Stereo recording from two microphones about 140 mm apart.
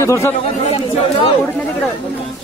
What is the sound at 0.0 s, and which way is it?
Speech, 20° left (ahead or behind).